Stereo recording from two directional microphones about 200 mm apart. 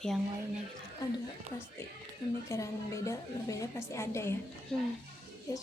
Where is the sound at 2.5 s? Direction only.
15° left (ahead or behind).